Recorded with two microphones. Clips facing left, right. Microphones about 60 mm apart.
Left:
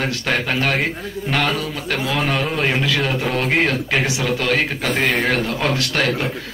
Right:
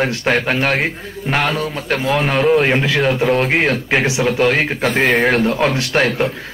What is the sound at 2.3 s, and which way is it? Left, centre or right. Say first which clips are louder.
Speech: right 10 dB; centre.